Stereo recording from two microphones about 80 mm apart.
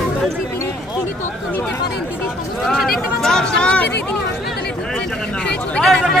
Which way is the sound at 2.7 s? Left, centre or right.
Centre.